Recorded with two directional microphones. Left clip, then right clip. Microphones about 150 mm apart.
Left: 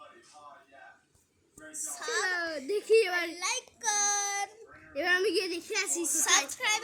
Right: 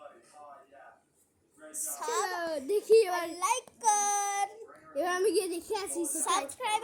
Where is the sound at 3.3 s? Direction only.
10° right (ahead or behind).